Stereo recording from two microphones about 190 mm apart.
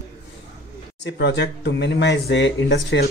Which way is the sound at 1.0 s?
65° left (ahead or behind).